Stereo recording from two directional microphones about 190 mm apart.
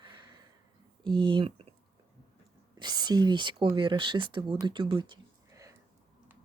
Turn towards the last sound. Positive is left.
turn(degrees=-15)  # may be behind; listen again after turning